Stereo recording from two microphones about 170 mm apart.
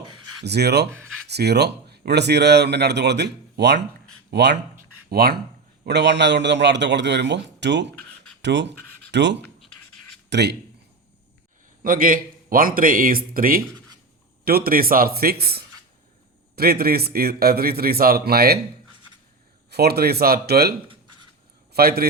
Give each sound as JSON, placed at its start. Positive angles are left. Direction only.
{"t": 0.4, "sound": "speech", "side_deg": -75}
{"t": 4.8, "sound": "a sound", "side_deg": -65}
{"t": 5.8, "sound": "a man's voice", "side_deg": -90}
{"t": 11.8, "sound": "a man's voice", "side_deg": -55}
{"t": 19.7, "sound": "speech", "side_deg": -70}
{"t": 20.8, "sound": "writing", "side_deg": -30}
{"t": 21.7, "sound": "a man's voice", "side_deg": -65}